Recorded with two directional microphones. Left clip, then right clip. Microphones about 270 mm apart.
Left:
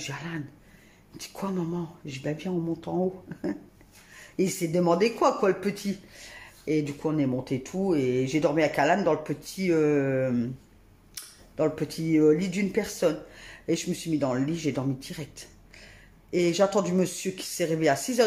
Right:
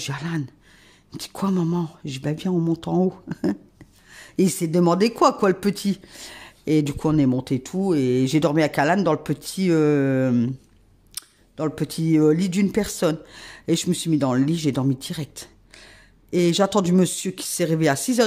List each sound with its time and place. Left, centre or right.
0.0 s speech: right